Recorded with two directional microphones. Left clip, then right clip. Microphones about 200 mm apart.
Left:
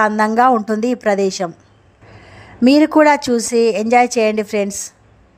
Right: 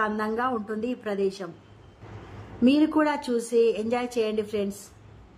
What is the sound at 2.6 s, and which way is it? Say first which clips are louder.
A woman's voice: left 11 dB; 30° left (ahead or behind).